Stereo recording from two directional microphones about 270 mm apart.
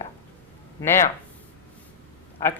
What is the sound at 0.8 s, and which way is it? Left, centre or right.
Speech, centre.